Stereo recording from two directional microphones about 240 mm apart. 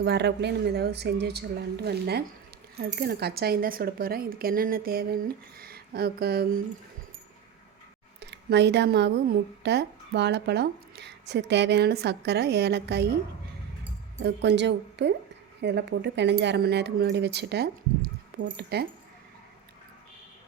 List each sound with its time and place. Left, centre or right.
0.0 s a woman's voice: right
8.2 s a woman's voice: right
14.2 s a woman's voice: right